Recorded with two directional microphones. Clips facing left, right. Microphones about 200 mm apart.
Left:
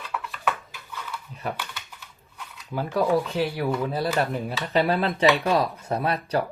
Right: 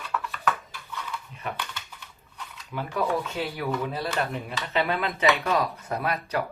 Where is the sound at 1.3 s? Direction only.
40° left (ahead or behind).